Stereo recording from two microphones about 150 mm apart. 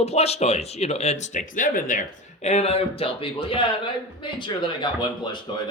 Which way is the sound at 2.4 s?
45° left (ahead or behind).